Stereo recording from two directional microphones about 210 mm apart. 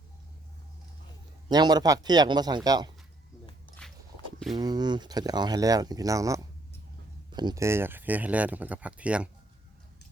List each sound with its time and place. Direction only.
1.5 s speech: 20° right (ahead or behind)
3.8 s walk: 5° left (ahead or behind)
4.5 s speech: 20° right (ahead or behind)